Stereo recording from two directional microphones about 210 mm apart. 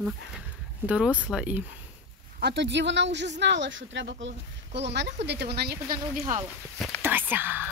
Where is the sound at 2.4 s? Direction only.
50° right (ahead or behind).